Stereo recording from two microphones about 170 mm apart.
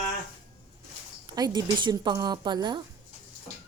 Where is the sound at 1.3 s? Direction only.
25° right (ahead or behind).